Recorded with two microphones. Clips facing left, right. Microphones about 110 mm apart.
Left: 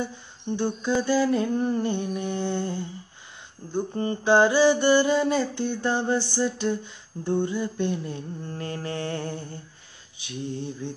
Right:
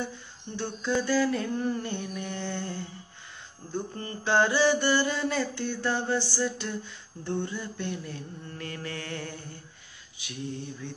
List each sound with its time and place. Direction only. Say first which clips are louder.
0.6 s mantra: left 3 dB; 15° left (ahead or behind)
10.8 s mantra: left 6 dB; 25° left (ahead or behind)